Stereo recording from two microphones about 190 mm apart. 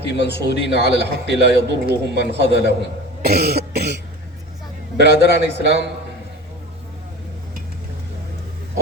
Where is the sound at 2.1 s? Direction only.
60° left (ahead or behind).